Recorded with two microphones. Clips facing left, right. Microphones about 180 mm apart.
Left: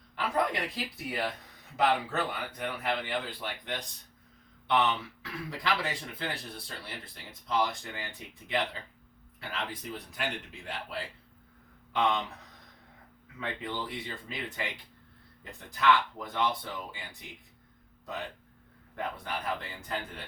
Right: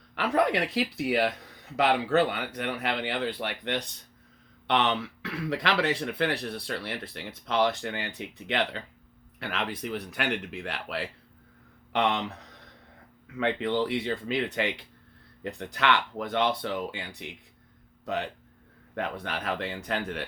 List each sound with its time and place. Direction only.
0.2 s speech: 80° right
13.4 s speech: 75° right (ahead or behind)